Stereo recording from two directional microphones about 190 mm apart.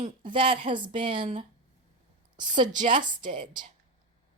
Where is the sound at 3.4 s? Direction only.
25° right (ahead or behind).